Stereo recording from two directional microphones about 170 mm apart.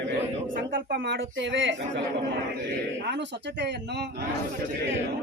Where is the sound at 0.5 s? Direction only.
60° right (ahead or behind); by 1.7 s 90° right.